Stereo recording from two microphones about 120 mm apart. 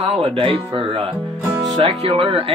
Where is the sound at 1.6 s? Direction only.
30° right (ahead or behind).